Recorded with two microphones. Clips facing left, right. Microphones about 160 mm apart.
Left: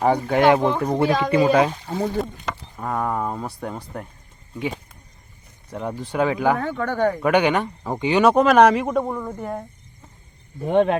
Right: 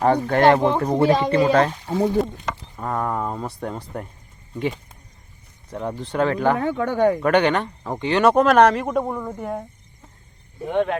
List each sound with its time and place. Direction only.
0.0 s speech: 10° left (ahead or behind)
2.7 s speech: centre (ahead or behind)
5.7 s speech: 5° left (ahead or behind)
6.6 s speech: 10° right (ahead or behind)
7.2 s speech: 10° left (ahead or behind)
10.7 s speech: 25° left (ahead or behind)